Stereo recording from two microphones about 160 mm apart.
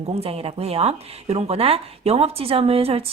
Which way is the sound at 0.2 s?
40° right (ahead or behind).